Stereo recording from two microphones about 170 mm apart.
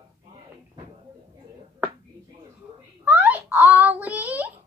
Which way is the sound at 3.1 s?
10° right (ahead or behind).